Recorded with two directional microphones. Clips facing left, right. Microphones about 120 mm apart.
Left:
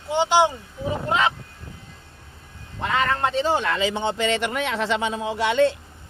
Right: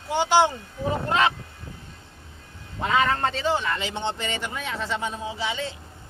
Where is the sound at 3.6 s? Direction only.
80° left; by 5.8 s 65° left (ahead or behind).